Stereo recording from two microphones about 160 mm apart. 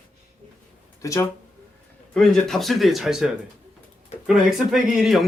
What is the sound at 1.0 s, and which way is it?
Speech, 20° left (ahead or behind).